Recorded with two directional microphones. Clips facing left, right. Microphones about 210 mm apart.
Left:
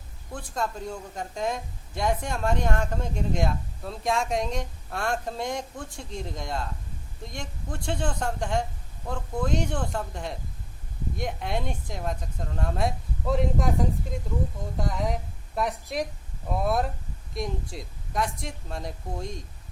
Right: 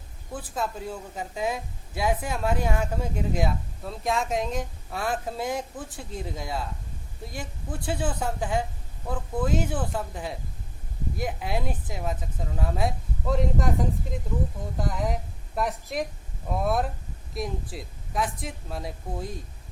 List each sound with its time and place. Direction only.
0.3 s speech: 5° right (ahead or behind)